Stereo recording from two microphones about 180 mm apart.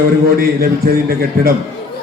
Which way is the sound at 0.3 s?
55° right (ahead or behind).